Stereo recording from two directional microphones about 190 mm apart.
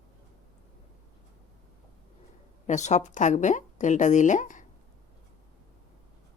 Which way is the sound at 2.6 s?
40° left (ahead or behind).